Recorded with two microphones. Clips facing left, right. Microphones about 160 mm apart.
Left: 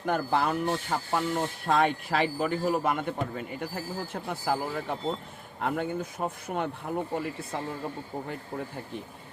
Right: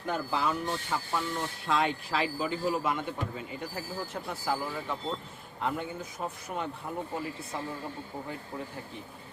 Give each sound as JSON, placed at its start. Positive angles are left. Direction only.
{"t": 0.0, "sound": "speech", "side_deg": 60}